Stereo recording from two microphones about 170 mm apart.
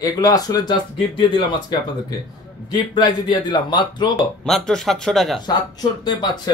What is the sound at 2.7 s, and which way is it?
Speech, 25° left (ahead or behind).